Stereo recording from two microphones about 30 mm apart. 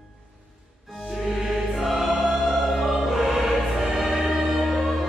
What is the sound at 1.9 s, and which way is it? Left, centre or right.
Music, centre.